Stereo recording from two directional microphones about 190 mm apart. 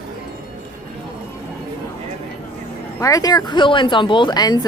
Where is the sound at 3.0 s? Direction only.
20° left (ahead or behind).